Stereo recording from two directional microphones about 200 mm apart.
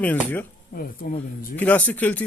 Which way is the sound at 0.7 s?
45° left (ahead or behind).